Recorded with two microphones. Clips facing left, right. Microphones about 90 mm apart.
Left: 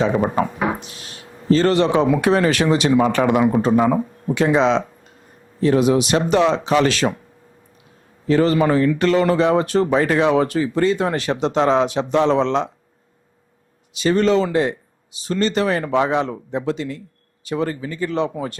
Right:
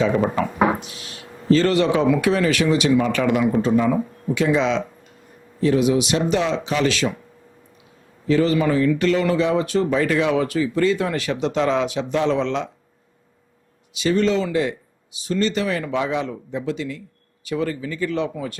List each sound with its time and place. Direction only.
0.8 s a sound: 35° left (ahead or behind)
1.5 s speech: 35° left (ahead or behind)
8.3 s speech: 40° left (ahead or behind)
13.9 s speech: 40° left (ahead or behind)